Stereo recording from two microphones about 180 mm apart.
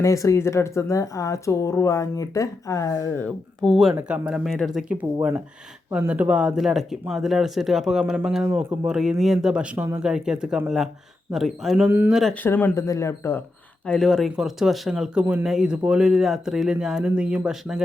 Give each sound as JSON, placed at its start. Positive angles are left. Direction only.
{"t": 0.0, "sound": "speech", "side_deg": 15}
{"t": 3.2, "sound": "speech", "side_deg": 5}
{"t": 13.8, "sound": "speech", "side_deg": 5}